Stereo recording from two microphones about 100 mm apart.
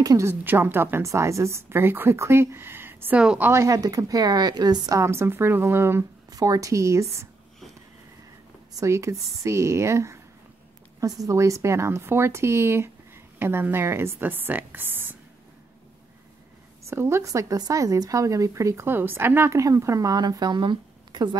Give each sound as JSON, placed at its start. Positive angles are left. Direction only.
{"t": 0.0, "sound": "speech", "side_deg": -40}
{"t": 0.3, "sound": "speech", "side_deg": -20}
{"t": 3.2, "sound": "a woman's voice", "side_deg": -10}
{"t": 3.4, "sound": "speech", "side_deg": -30}
{"t": 5.0, "sound": "speech", "side_deg": -25}
{"t": 6.3, "sound": "speech", "side_deg": -40}
{"t": 8.7, "sound": "speech", "side_deg": -30}
{"t": 11.2, "sound": "speech", "side_deg": -30}
{"t": 16.9, "sound": "speech", "side_deg": -25}